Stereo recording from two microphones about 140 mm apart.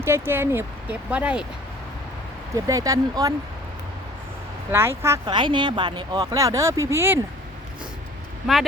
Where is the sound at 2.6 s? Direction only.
25° right (ahead or behind).